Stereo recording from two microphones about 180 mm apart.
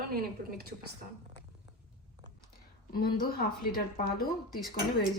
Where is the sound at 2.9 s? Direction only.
55° left (ahead or behind).